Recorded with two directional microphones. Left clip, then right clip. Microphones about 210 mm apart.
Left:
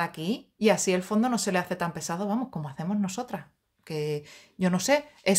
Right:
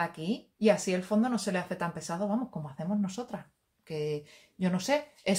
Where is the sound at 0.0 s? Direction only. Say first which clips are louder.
Left 3 dB; 35° left (ahead or behind).